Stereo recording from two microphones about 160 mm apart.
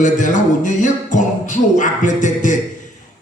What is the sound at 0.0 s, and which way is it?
Speech, 50° left (ahead or behind).